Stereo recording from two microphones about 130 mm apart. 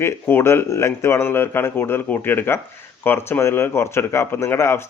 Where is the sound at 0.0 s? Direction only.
20° left (ahead or behind).